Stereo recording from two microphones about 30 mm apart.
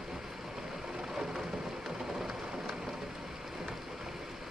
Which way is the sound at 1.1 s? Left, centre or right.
Centre.